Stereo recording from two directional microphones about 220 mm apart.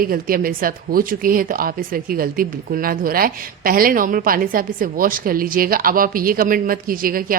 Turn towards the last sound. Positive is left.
turn(degrees=-40)  # may be behind; listen again after turning